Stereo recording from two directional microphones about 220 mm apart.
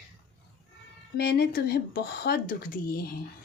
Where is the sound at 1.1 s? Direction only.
45° left (ahead or behind).